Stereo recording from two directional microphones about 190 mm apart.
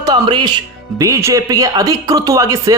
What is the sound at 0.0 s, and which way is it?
Speech, 25° right (ahead or behind).